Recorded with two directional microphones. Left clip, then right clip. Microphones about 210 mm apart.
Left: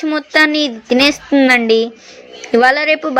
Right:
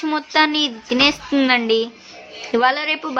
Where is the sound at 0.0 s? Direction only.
20° left (ahead or behind).